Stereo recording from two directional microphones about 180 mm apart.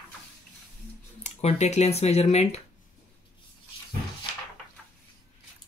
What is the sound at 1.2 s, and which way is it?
Speech, 40° left (ahead or behind).